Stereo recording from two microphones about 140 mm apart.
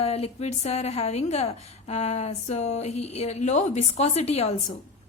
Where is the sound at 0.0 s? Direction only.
50° left (ahead or behind).